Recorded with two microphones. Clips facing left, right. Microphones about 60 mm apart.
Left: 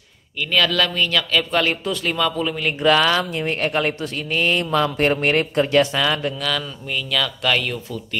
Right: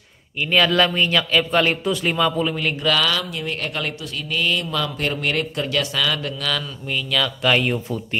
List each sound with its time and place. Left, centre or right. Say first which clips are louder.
0.4 s speech: right 2 dB; centre
2.7 s speech: left 7 dB; left
6.3 s speech: left 1 dB; centre
7.5 s speech: right 3 dB; centre